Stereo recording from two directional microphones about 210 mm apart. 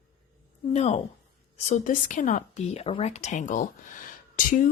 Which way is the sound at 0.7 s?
30° left (ahead or behind).